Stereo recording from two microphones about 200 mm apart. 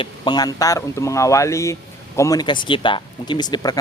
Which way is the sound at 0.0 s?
20° left (ahead or behind).